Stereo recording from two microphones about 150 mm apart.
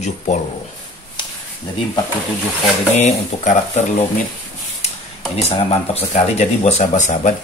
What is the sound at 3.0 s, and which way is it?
Speech, 45° left (ahead or behind).